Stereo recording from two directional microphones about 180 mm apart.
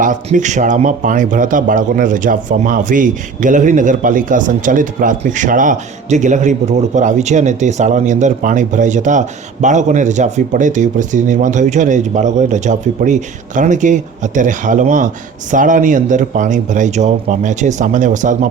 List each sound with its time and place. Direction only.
0.0 s a man's voice: 45° right (ahead or behind)